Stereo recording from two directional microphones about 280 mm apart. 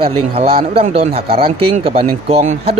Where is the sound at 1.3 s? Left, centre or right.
Centre.